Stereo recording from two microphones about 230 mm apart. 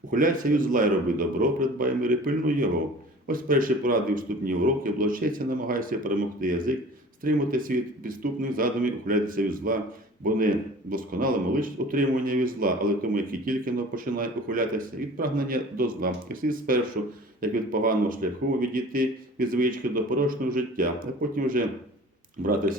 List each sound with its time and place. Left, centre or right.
0.1 s speech: right